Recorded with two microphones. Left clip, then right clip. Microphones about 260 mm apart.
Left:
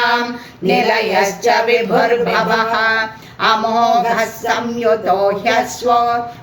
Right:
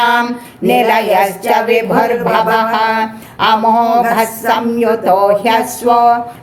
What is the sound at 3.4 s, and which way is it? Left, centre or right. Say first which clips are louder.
Speech: right 3 dB; right.